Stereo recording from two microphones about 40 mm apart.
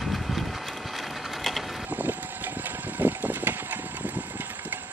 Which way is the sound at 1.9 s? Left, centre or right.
Right.